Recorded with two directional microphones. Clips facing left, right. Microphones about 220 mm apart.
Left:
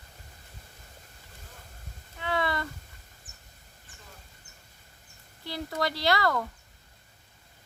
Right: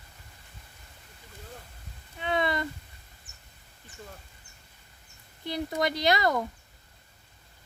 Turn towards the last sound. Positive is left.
turn(degrees=-20)  # may be behind; listen again after turning